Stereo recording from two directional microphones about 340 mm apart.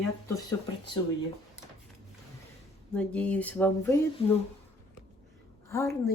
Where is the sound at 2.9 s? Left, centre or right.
Centre.